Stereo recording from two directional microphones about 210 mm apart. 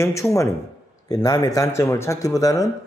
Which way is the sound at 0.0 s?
15° left (ahead or behind).